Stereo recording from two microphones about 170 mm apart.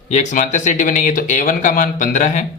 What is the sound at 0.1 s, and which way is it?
A woman's voice, 45° left (ahead or behind).